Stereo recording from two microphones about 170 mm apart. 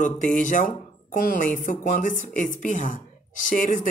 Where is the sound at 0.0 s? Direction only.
45° left (ahead or behind).